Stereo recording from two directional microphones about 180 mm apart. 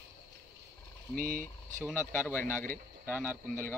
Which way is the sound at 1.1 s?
50° right (ahead or behind).